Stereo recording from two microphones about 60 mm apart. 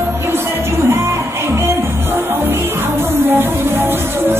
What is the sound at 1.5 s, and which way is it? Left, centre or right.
Music, right.